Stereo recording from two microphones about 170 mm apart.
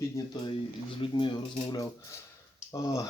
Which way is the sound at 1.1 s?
25° left (ahead or behind).